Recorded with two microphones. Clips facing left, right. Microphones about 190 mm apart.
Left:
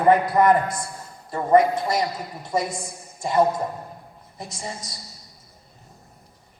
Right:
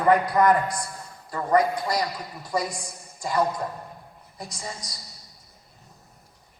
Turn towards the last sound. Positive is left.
turn(degrees=25)  # may be behind; listen again after turning